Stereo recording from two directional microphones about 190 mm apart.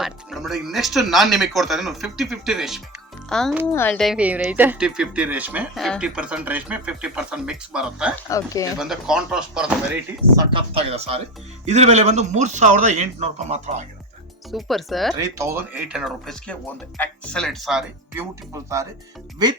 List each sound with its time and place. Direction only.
0.0 s a child's voice: centre (ahead or behind)
8.3 s speech: 15° left (ahead or behind)
8.8 s speech: 5° right (ahead or behind)
10.3 s speech: 25° right (ahead or behind)
14.5 s speech: centre (ahead or behind)
15.1 s speech: 15° right (ahead or behind)
18.1 s speech: 15° right (ahead or behind)